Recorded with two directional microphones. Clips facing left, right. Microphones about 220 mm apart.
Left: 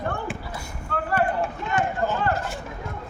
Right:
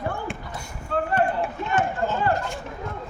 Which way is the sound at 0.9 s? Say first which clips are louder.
Right 4 dB; 25° right (ahead or behind).